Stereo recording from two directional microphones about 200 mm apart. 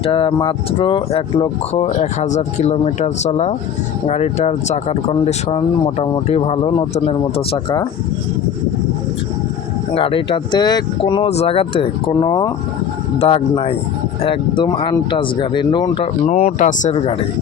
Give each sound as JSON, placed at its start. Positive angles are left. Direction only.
{"t": 0.0, "sound": "speech", "side_deg": 25}
{"t": 9.9, "sound": "speech", "side_deg": 25}
{"t": 16.2, "sound": "speech", "side_deg": 35}